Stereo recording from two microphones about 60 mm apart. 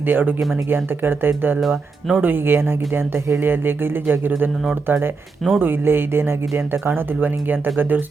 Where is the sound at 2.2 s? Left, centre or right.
Right.